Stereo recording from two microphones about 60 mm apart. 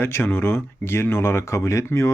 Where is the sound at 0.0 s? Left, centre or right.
Left.